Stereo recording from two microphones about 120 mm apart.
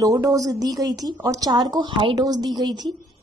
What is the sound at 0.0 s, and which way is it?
A woman's voice, 30° right (ahead or behind).